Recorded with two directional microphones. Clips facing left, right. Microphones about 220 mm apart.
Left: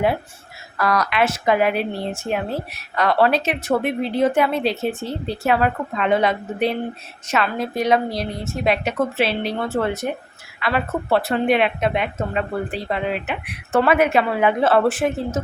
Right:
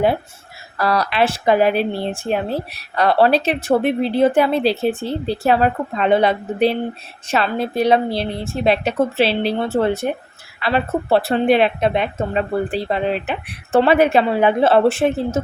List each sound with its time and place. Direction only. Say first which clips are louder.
0.8 s a woman's voice: right 2 dB; 30° right (ahead or behind)